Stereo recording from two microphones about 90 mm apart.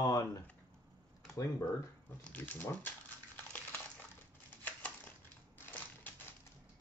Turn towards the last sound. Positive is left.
turn(degrees=15)  # may be behind; listen again after turning